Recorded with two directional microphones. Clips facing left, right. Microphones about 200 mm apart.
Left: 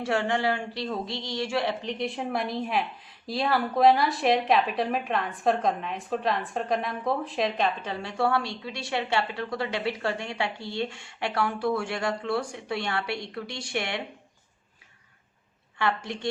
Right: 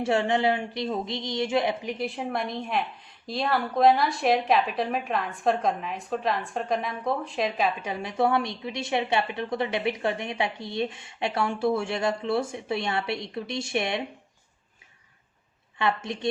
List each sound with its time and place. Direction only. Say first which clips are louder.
0.0 s speech: right 3 dB; 25° right (ahead or behind)
15.8 s speech: right 1 dB; 20° right (ahead or behind)